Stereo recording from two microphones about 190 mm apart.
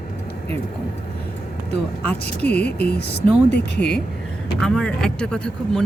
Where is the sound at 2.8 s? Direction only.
55° left (ahead or behind).